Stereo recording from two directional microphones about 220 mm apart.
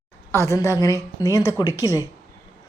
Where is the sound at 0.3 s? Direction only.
10° left (ahead or behind).